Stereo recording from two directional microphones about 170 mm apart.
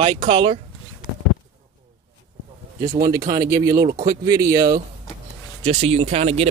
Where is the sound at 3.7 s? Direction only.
60° right (ahead or behind).